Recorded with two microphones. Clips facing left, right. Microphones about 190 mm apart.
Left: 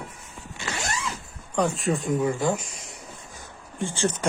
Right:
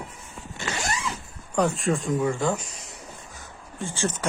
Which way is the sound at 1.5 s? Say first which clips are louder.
Right 1 dB; centre (ahead or behind).